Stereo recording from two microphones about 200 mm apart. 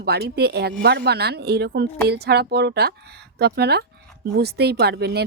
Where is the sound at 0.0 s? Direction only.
55° right (ahead or behind).